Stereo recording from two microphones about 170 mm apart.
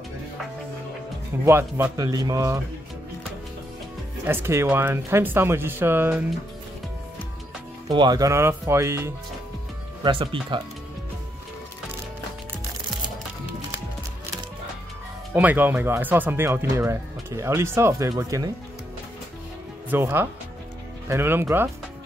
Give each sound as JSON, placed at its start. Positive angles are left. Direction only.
{"t": 1.4, "sound": "speech", "side_deg": -15}
{"t": 4.3, "sound": "speech", "side_deg": -15}
{"t": 7.9, "sound": "speech", "side_deg": -25}
{"t": 10.0, "sound": "speech", "side_deg": -30}
{"t": 15.3, "sound": "speech", "side_deg": -10}
{"t": 19.9, "sound": "speech", "side_deg": -15}